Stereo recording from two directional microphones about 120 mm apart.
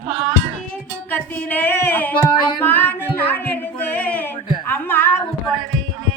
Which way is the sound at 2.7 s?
15° left (ahead or behind).